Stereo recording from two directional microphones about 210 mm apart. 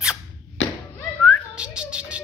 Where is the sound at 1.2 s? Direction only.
5° right (ahead or behind).